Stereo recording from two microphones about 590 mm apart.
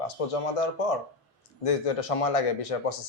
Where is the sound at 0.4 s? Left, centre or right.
Left.